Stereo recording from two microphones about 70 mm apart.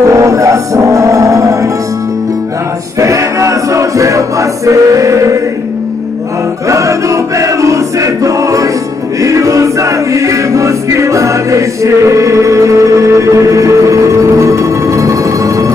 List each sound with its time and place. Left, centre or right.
0.1 s music: right
3.0 s music: right
6.7 s choir: right